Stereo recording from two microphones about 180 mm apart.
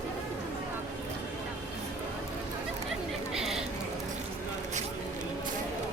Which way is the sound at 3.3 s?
Centre (ahead or behind).